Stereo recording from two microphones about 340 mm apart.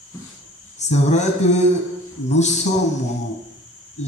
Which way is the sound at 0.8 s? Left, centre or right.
Centre.